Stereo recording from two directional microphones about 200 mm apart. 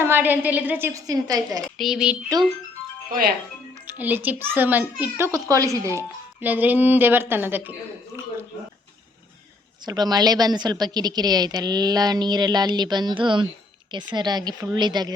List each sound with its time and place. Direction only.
0.0 s a child's voice: 10° right (ahead or behind)
1.8 s speech: centre (ahead or behind)
3.1 s speech: 50° right (ahead or behind)
3.8 s a child's voice: 10° right (ahead or behind)
9.8 s a woman's voice: 20° right (ahead or behind)